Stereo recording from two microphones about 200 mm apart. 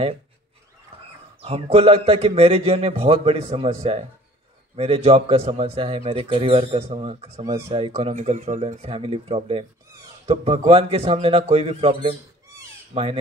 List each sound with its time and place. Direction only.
1.4 s a man's voice: 30° right (ahead or behind)